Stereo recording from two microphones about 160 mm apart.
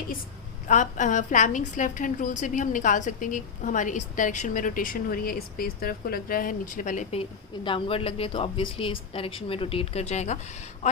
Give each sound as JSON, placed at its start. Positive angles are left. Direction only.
{"t": 0.7, "sound": "a woman's voice", "side_deg": 50}
{"t": 7.2, "sound": "a woman's voice", "side_deg": 30}